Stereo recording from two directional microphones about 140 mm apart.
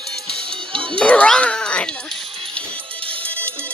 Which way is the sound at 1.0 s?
10° left (ahead or behind).